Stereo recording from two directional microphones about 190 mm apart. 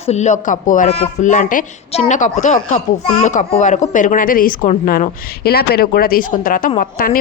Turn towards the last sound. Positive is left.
turn(degrees=45)  # may be behind; listen again after turning